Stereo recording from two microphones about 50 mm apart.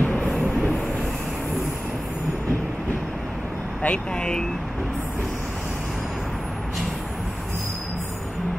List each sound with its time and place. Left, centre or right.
0.0 s train: left
3.8 s speech: left